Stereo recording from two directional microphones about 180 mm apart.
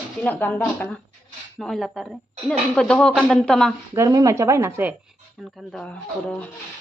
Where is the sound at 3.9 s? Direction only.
20° right (ahead or behind).